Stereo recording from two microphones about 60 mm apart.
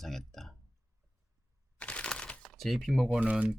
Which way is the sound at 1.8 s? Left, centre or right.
Left.